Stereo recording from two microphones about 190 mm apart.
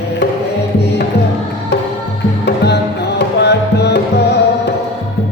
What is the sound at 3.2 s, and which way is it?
Tabla, 60° left (ahead or behind).